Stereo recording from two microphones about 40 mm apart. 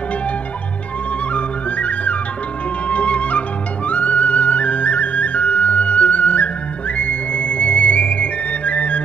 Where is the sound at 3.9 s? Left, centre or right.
Left.